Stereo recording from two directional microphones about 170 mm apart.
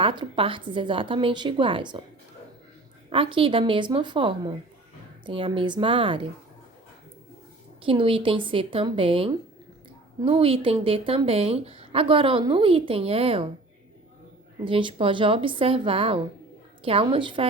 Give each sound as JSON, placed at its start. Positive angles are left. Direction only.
{"t": 0.0, "sound": "a woman's voice", "side_deg": -30}
{"t": 3.1, "sound": "a woman's voice", "side_deg": -30}
{"t": 7.8, "sound": "speech", "side_deg": -30}
{"t": 14.6, "sound": "speech", "side_deg": -30}